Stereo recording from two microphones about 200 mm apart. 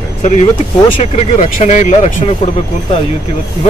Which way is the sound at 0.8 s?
30° left (ahead or behind).